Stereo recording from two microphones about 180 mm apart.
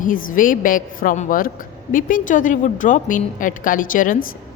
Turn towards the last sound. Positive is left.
turn(degrees=50)  # may be behind; listen again after turning